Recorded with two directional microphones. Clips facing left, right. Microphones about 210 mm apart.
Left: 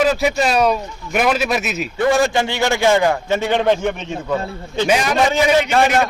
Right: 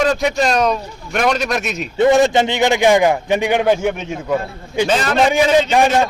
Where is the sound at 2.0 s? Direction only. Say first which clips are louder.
Right 4 dB; 20° right (ahead or behind).